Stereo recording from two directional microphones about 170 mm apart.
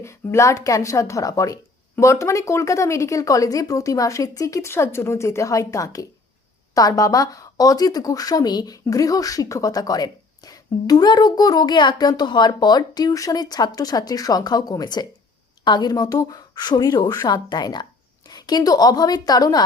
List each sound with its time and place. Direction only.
0.0 s speech: 15° left (ahead or behind)